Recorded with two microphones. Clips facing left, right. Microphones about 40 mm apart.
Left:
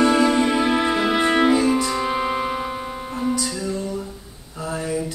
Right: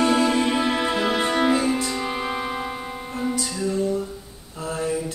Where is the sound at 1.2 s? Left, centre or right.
Left.